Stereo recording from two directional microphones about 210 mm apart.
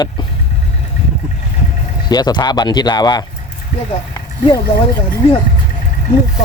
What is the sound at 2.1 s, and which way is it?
Speech, 20° left (ahead or behind).